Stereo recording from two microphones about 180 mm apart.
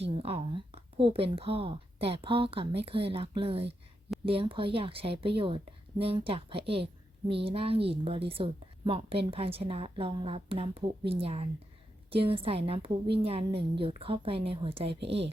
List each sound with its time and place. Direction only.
0.0 s a woman's voice: 35° right (ahead or behind)